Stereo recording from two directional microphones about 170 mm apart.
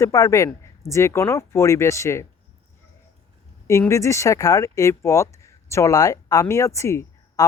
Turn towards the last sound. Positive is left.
turn(degrees=15)  # may be behind; listen again after turning